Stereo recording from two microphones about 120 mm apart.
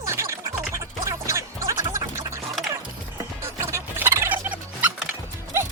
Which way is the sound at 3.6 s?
20° right (ahead or behind).